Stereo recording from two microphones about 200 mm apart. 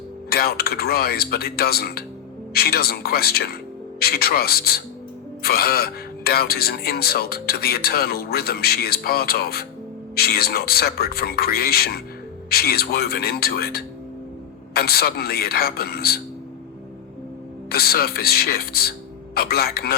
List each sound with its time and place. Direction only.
0.3 s speech: 50° left (ahead or behind)
17.7 s speech: 50° left (ahead or behind)